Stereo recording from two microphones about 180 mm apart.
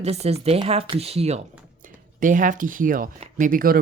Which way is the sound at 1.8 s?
45° right (ahead or behind).